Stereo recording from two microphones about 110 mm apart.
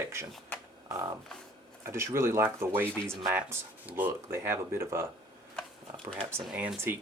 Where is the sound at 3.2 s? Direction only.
5° right (ahead or behind).